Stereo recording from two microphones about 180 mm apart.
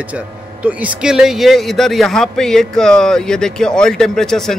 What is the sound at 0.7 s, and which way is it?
A man's voice, 5° right (ahead or behind).